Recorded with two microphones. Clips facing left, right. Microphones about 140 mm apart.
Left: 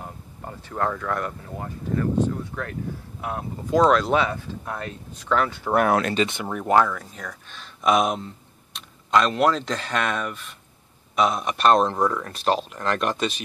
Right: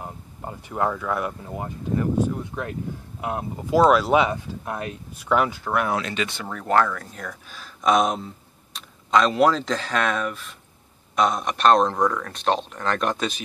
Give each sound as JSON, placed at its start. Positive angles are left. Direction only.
{"t": 0.0, "sound": "a sound", "side_deg": -15}
{"t": 1.6, "sound": "speech", "side_deg": -15}
{"t": 3.7, "sound": "speech", "side_deg": -5}
{"t": 5.8, "sound": "speech", "side_deg": 50}
{"t": 6.1, "sound": "speech", "side_deg": 20}